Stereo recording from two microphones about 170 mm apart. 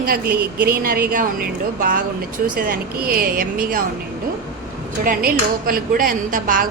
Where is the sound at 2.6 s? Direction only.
60° right (ahead or behind).